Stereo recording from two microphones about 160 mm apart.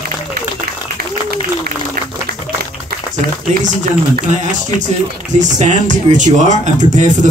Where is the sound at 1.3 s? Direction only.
60° right (ahead or behind).